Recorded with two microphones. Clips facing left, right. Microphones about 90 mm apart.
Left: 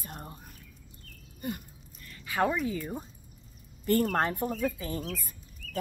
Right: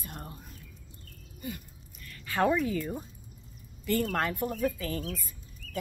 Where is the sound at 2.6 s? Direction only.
15° left (ahead or behind).